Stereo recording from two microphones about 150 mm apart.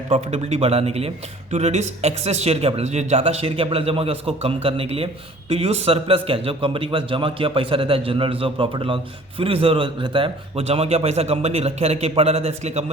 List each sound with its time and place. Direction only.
0.1 s a man's voice: 45° right (ahead or behind)